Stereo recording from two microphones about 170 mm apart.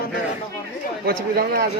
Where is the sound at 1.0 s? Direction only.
65° right (ahead or behind).